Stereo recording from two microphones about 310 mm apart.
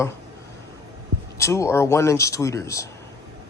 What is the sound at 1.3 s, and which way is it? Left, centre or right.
Speech, centre.